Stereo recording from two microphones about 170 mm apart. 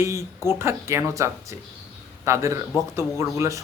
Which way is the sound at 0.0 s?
15° right (ahead or behind).